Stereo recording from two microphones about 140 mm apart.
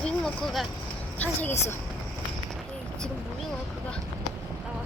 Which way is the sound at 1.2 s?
10° left (ahead or behind).